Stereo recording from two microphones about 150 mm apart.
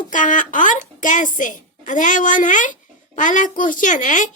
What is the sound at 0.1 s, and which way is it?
A woman's voice, 60° left (ahead or behind).